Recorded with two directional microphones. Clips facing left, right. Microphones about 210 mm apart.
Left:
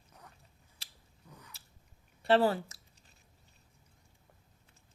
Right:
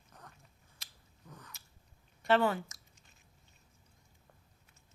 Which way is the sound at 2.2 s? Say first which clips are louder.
Left 2 dB; 35° left (ahead or behind).